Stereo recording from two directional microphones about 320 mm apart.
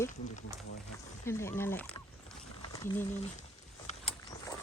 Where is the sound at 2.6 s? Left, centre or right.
Centre.